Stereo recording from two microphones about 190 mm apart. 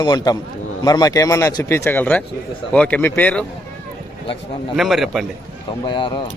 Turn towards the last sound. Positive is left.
turn(degrees=25)  # may be behind; listen again after turning